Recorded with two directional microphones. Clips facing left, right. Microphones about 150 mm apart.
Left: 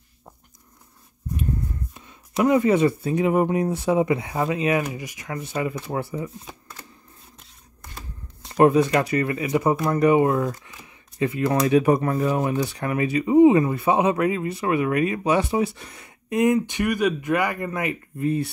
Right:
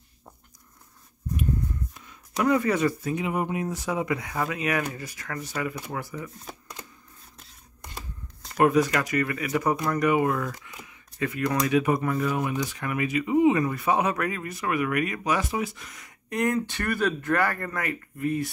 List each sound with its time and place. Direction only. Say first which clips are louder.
2.0 s speech: left 6 dB; 25° left (ahead or behind)
3.2 s speech: left 8 dB; 45° left (ahead or behind)
8.5 s speech: left 4 dB; 25° left (ahead or behind)